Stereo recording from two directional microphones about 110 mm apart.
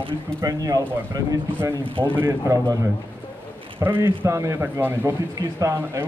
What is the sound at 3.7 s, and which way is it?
Speech, 20° right (ahead or behind).